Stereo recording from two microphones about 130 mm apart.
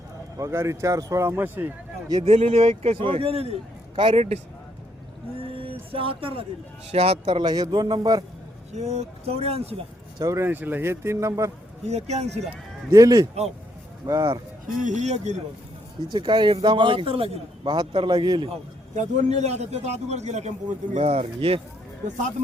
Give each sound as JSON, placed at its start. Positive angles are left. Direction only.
{"t": 0.3, "sound": "speech", "side_deg": -20}
{"t": 2.2, "sound": "a man's voice", "side_deg": -55}
{"t": 5.5, "sound": "a sound", "side_deg": -45}
{"t": 6.9, "sound": "a man's voice", "side_deg": -50}
{"t": 8.7, "sound": "a man's voice", "side_deg": -55}
{"t": 10.2, "sound": "speech", "side_deg": -25}
{"t": 11.9, "sound": "a man's voice", "side_deg": -55}
{"t": 12.9, "sound": "speech", "side_deg": -30}
{"t": 14.8, "sound": "a man's voice", "side_deg": -65}
{"t": 16.1, "sound": "a man's voice", "side_deg": -35}
{"t": 17.7, "sound": "a man's voice", "side_deg": -35}
{"t": 18.9, "sound": "a man's voice", "side_deg": -60}